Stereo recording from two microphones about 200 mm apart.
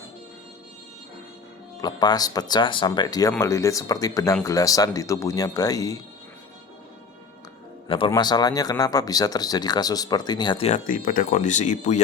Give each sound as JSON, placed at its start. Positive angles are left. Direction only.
{"t": 1.8, "sound": "speech", "side_deg": 20}
{"t": 7.9, "sound": "speech", "side_deg": 25}
{"t": 10.7, "sound": "speech", "side_deg": 45}